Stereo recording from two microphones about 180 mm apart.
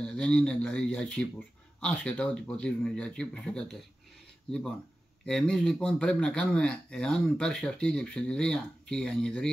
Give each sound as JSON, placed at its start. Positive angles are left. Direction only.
{"t": 0.0, "sound": "a man's voice", "side_deg": 5}